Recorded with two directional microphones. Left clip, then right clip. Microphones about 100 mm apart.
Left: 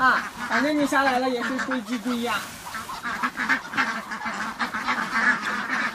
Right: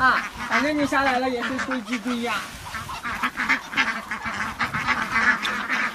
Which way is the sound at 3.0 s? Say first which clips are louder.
Right 1 dB; 5° right (ahead or behind).